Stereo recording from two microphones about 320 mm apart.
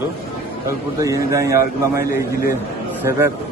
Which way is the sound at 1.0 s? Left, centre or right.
Centre.